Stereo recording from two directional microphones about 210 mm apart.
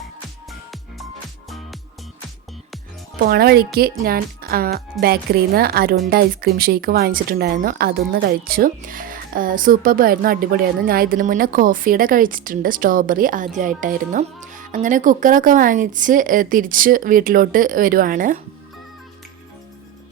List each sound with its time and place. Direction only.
0.7 s music: centre (ahead or behind)
3.2 s speech: 45° right (ahead or behind)